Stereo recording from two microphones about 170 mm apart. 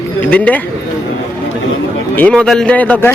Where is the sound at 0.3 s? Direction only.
10° left (ahead or behind).